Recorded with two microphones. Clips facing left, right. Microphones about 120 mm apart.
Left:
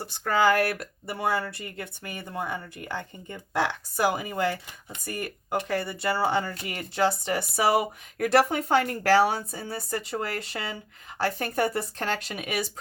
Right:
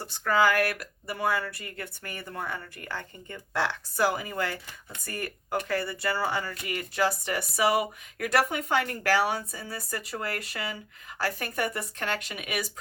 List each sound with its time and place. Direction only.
0.0 s speech: 25° left (ahead or behind)